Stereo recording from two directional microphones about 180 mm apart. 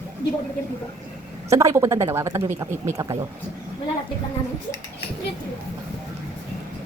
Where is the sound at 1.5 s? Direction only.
15° right (ahead or behind).